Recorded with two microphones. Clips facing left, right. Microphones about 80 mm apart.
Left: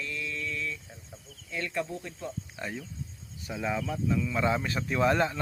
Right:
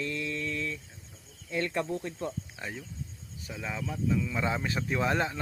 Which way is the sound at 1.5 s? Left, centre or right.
Right.